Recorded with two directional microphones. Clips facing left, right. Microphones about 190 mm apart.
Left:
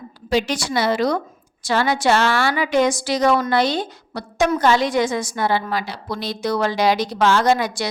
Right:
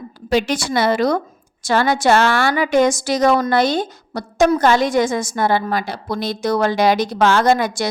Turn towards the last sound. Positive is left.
turn(degrees=-50)  # may be behind; listen again after turning